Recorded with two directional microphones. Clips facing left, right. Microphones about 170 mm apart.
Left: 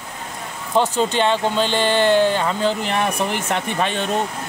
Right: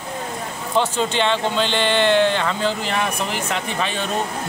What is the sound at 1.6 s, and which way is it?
Mantra, 40° left (ahead or behind).